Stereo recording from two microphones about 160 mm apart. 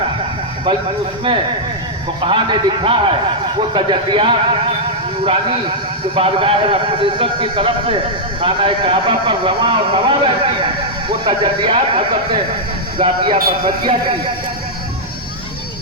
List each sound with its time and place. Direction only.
2.2 s speech: 30° right (ahead or behind)